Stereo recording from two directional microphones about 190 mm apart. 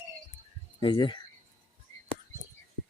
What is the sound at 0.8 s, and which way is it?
Speech, 25° left (ahead or behind).